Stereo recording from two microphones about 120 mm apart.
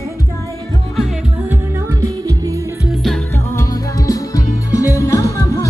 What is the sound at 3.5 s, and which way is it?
Music, 30° left (ahead or behind).